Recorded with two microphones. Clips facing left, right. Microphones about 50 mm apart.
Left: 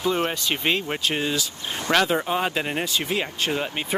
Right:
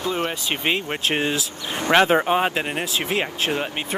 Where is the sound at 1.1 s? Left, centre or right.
Right.